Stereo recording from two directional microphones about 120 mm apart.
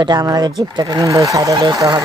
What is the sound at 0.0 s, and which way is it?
Speech, 35° right (ahead or behind).